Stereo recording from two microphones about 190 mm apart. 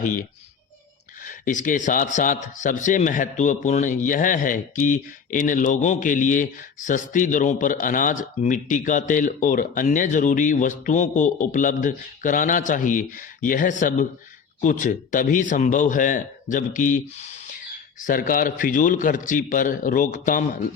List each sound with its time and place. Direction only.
0.0 s a man's voice: 45° left (ahead or behind)
18.0 s a man's voice: 45° left (ahead or behind)